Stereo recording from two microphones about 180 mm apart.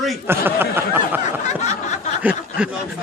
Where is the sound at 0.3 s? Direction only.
10° right (ahead or behind).